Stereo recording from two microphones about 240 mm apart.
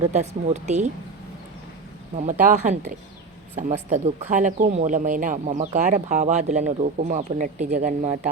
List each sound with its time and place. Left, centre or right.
0.0 s speech: right
2.4 s speech: right